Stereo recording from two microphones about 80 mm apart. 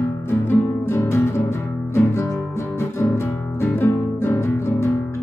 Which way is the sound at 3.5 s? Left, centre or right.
Left.